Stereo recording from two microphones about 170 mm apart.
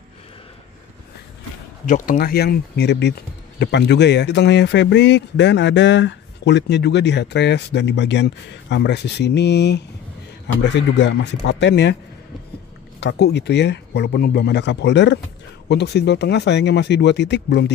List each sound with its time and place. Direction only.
1.9 s speech: 55° left (ahead or behind); by 12.0 s 85° left
13.0 s speech: 80° left
15.7 s speech: 75° left (ahead or behind)